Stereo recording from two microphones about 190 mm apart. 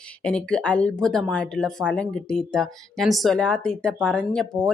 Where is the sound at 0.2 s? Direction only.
5° left (ahead or behind).